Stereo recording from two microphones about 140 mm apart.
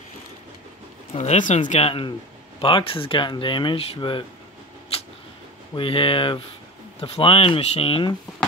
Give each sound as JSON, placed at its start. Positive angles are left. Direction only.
{"t": 1.1, "sound": "speech", "side_deg": 55}
{"t": 5.8, "sound": "speech", "side_deg": 40}